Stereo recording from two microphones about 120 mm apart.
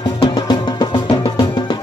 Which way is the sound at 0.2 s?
40° left (ahead or behind).